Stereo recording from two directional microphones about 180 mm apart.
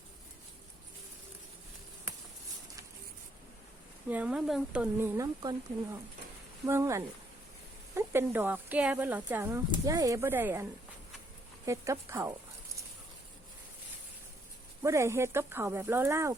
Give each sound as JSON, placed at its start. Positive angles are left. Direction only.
{"t": 4.1, "sound": "speech", "side_deg": -5}
{"t": 6.7, "sound": "speech", "side_deg": -15}
{"t": 14.8, "sound": "speech", "side_deg": -15}